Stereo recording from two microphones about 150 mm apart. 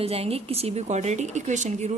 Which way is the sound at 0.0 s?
40° right (ahead or behind).